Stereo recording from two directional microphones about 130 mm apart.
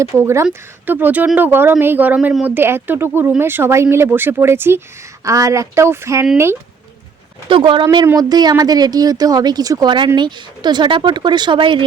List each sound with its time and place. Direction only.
0.0 s speech: 20° right (ahead or behind)
7.4 s speech: 40° right (ahead or behind)